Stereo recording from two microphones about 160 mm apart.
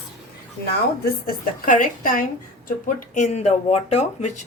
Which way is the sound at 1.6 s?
55° left (ahead or behind).